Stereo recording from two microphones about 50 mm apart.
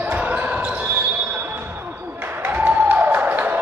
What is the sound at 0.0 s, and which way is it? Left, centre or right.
Basketball bounce, right.